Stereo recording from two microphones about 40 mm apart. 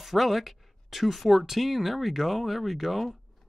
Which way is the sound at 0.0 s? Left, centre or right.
Centre.